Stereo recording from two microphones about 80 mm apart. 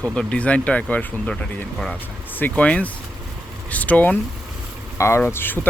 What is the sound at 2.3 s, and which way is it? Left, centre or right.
Speech, centre.